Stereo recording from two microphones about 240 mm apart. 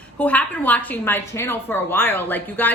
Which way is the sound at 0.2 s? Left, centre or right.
Centre.